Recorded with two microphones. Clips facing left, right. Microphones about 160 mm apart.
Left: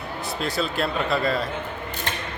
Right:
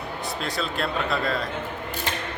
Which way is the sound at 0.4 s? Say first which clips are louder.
Left 4 dB; centre (ahead or behind).